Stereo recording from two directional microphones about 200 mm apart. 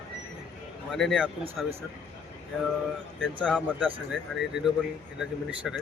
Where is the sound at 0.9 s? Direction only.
Centre (ahead or behind).